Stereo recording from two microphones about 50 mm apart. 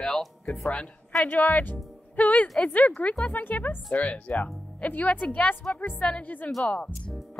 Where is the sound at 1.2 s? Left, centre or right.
Left.